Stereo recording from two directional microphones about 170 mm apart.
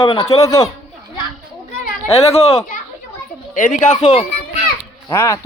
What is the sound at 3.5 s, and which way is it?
Speech, 50° left (ahead or behind).